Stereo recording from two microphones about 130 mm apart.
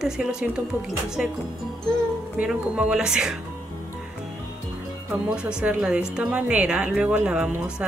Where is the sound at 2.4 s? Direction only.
5° right (ahead or behind).